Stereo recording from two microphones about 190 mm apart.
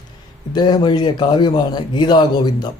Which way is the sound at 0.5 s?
20° left (ahead or behind).